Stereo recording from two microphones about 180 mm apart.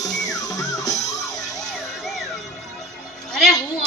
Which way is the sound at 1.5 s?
Centre (ahead or behind).